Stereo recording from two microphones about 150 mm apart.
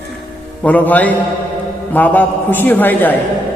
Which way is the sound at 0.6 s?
10° left (ahead or behind).